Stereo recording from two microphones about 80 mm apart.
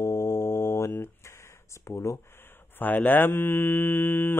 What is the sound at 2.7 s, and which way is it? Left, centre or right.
Speech, left.